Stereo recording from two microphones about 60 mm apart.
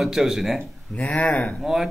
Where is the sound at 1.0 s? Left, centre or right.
Left.